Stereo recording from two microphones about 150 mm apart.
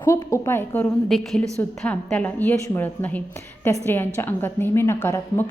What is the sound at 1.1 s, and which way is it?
A woman's voice, centre (ahead or behind).